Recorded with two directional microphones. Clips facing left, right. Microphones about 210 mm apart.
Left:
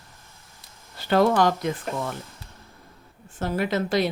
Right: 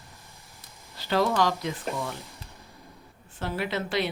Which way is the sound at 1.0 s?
50° left (ahead or behind).